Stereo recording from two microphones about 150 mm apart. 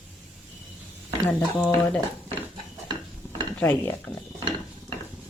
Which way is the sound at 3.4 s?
15° left (ahead or behind).